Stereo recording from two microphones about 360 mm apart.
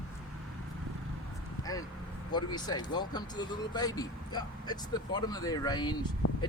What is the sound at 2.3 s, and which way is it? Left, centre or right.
Speech, centre.